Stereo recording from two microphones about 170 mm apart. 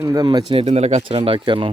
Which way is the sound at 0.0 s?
20° right (ahead or behind).